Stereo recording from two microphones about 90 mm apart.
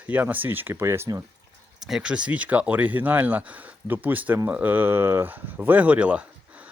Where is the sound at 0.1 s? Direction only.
20° right (ahead or behind).